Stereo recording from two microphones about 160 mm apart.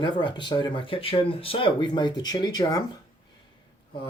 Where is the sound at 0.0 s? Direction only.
30° left (ahead or behind).